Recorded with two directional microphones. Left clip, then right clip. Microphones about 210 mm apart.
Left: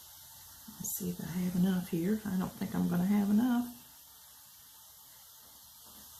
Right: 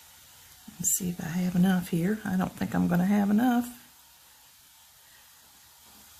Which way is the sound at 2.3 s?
55° right (ahead or behind).